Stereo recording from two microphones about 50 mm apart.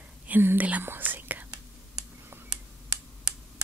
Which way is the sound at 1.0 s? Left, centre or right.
Right.